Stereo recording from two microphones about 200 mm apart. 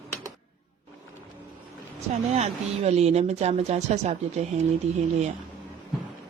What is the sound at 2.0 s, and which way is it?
A woman's voice, 30° right (ahead or behind).